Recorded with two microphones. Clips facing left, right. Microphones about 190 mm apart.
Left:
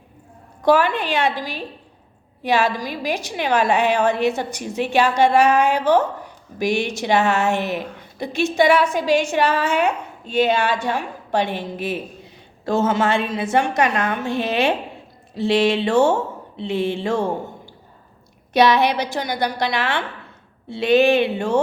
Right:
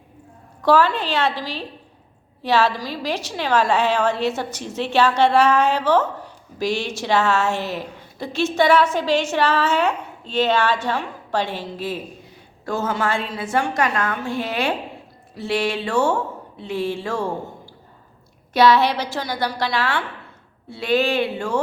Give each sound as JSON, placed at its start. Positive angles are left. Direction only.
{"t": 0.6, "sound": "a woman's voice", "side_deg": 15}
{"t": 18.5, "sound": "a woman's voice", "side_deg": 20}